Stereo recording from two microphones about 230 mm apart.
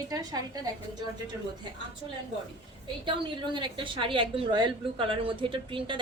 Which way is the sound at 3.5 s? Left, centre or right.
Right.